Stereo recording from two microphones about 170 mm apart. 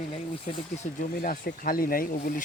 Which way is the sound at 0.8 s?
45° left (ahead or behind).